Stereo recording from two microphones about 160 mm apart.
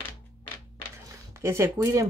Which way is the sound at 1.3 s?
15° right (ahead or behind).